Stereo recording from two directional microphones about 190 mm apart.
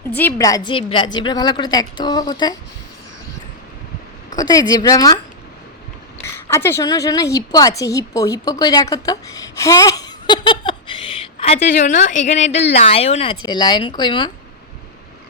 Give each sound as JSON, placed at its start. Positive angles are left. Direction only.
{"t": 0.1, "sound": "a woman's voice", "side_deg": 10}
{"t": 4.4, "sound": "a woman's voice", "side_deg": 20}
{"t": 6.2, "sound": "a woman's voice", "side_deg": 15}